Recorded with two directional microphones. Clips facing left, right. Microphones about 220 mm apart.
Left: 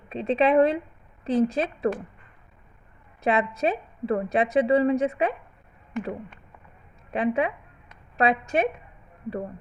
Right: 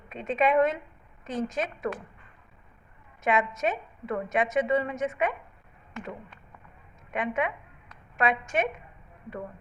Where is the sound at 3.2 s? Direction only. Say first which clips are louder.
Left 3 dB; 30° left (ahead or behind).